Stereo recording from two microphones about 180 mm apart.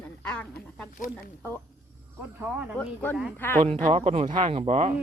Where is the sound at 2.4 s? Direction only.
10° right (ahead or behind).